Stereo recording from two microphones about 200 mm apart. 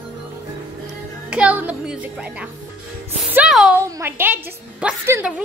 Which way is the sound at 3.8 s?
15° right (ahead or behind).